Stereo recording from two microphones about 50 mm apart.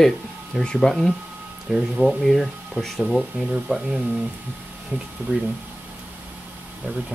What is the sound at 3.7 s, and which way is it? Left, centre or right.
Speech, right.